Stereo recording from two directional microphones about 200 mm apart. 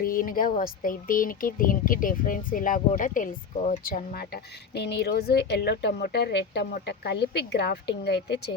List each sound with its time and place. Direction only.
0.0 s speech: 45° left (ahead or behind)